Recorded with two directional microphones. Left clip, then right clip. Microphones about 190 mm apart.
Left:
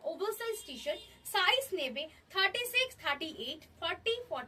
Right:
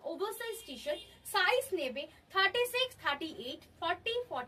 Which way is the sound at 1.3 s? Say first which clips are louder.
Even; 15° right (ahead or behind).